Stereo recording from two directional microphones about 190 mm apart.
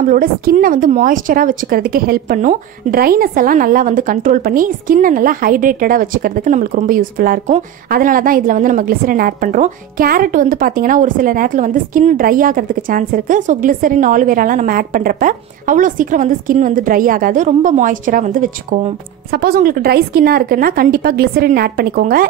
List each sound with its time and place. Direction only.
0.1 s a woman's voice: 50° right (ahead or behind)